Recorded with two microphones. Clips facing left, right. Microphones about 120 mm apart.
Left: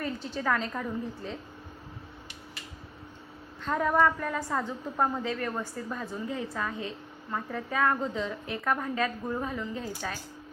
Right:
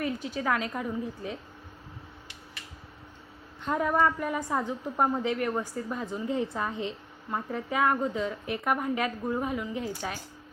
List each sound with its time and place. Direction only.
0.0 s a woman's voice: 10° right (ahead or behind)
3.6 s a woman's voice: 10° right (ahead or behind)